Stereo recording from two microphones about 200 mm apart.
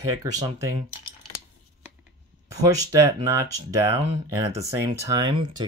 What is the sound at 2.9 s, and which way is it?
Speech, 15° right (ahead or behind).